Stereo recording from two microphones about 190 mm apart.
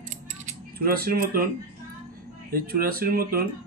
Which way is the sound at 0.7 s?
55° right (ahead or behind).